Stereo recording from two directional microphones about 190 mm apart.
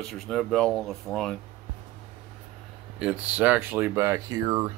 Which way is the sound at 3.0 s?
5° right (ahead or behind).